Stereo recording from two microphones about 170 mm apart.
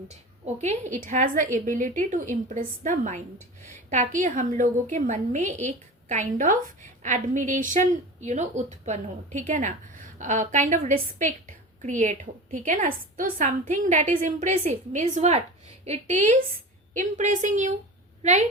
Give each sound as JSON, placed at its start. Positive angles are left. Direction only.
{"t": 0.1, "sound": "a woman's voice", "side_deg": -40}